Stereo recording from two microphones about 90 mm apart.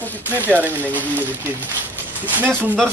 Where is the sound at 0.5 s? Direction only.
20° right (ahead or behind).